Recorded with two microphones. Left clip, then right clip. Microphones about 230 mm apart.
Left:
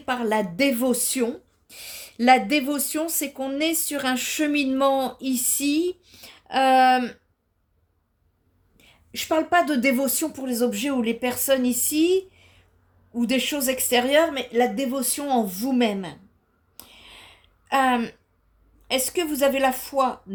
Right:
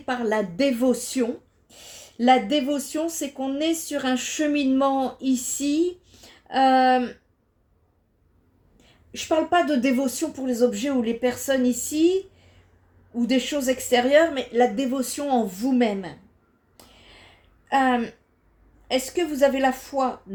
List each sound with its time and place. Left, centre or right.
0.0 s speech: left
9.1 s speech: left
13.1 s speech: left
16.7 s a sound: left
17.7 s speech: left